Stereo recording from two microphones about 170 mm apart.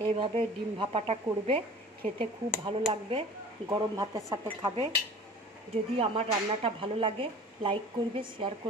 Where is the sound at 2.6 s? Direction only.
30° right (ahead or behind).